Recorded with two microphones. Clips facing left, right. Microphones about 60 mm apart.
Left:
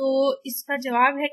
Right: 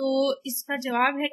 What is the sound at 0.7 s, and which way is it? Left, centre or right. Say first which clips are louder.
Speech: left 3 dB; left.